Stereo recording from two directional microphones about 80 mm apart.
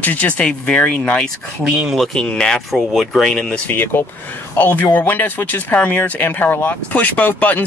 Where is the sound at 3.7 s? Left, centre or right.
Left.